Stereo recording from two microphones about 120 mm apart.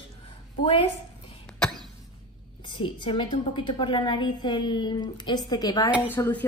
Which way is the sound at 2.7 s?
45° left (ahead or behind).